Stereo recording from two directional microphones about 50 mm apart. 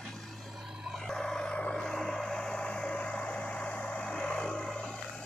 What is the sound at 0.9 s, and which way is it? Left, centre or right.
Vehicle, centre.